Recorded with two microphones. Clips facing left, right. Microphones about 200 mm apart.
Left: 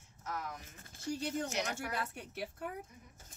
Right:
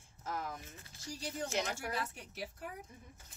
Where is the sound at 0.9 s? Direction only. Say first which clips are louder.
Left 6 dB; 55° left (ahead or behind).